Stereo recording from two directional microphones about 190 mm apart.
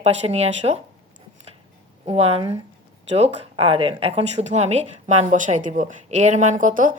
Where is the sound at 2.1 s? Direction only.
30° right (ahead or behind).